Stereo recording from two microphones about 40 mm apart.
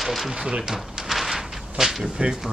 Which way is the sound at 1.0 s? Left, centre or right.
Centre.